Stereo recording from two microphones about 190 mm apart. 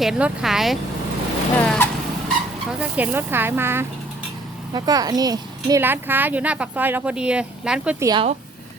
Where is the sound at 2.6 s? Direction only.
5° right (ahead or behind).